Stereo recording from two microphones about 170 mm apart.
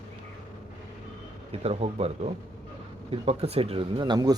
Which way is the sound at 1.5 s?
35° right (ahead or behind).